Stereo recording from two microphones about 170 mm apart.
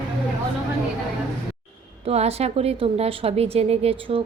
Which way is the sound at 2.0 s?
40° right (ahead or behind).